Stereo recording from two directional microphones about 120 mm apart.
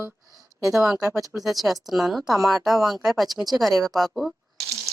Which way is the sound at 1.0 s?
30° right (ahead or behind).